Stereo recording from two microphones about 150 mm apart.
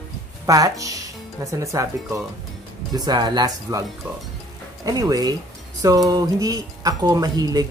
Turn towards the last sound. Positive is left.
turn(degrees=-25)  # may be behind; listen again after turning